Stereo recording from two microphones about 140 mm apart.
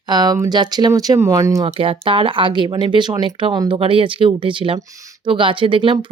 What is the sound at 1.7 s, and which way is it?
Speech, 40° right (ahead or behind).